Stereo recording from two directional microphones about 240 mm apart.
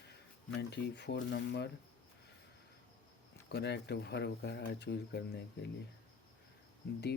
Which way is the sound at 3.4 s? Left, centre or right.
Left.